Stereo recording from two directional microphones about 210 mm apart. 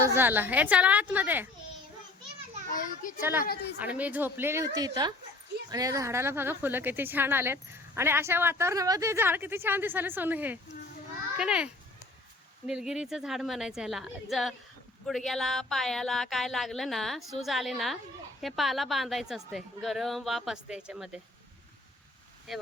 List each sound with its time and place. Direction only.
0.1 s a woman's voice: 10° right (ahead or behind)
2.6 s a child's voice: 40° left (ahead or behind)
3.2 s a woman's voice: 10° right (ahead or behind)